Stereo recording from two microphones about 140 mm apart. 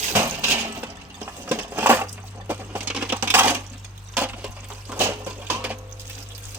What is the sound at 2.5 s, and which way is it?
Coin, 10° right (ahead or behind).